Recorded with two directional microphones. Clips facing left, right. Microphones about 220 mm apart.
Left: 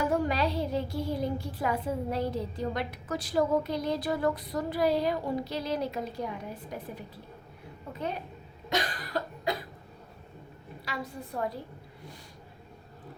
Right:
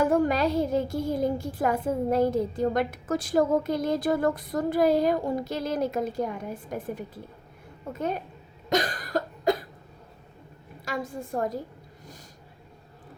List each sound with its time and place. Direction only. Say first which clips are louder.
0.0 s a sound: right 5 dB; 50° right (ahead or behind)
8.7 s cough: right 5 dB; 45° right (ahead or behind)
10.8 s a woman's voice: right 6 dB; 50° right (ahead or behind)